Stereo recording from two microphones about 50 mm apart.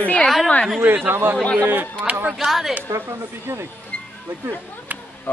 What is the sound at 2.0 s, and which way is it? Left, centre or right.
Speech, right.